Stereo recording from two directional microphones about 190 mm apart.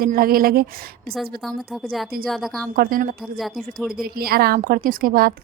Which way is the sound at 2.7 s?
50° right (ahead or behind).